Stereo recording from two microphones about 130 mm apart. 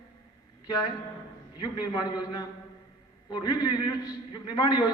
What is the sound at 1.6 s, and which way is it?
A man's voice, 35° left (ahead or behind).